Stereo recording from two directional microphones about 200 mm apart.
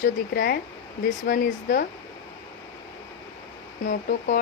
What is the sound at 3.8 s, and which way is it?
Speech, 40° left (ahead or behind).